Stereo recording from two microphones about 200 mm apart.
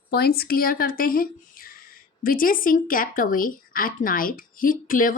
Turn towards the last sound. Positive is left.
turn(degrees=45)  # may be behind; listen again after turning